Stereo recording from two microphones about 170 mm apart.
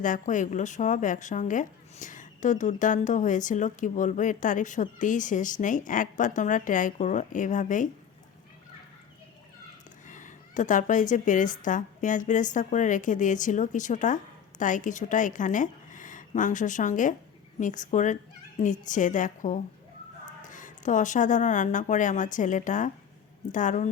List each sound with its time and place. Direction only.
0.0 s a woman's voice: 50° left (ahead or behind)
10.1 s a woman's voice: 50° left (ahead or behind)